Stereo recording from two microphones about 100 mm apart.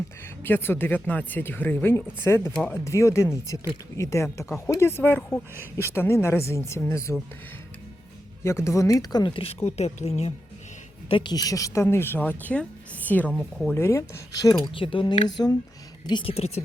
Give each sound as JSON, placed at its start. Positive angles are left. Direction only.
{"t": 0.4, "sound": "speech", "side_deg": 20}
{"t": 8.4, "sound": "speech", "side_deg": 30}
{"t": 9.7, "sound": "speech", "side_deg": 90}
{"t": 11.1, "sound": "speech", "side_deg": 50}
{"t": 13.7, "sound": "speech", "side_deg": 25}
{"t": 14.3, "sound": "speech", "side_deg": 45}
{"t": 16.2, "sound": "speech", "side_deg": 90}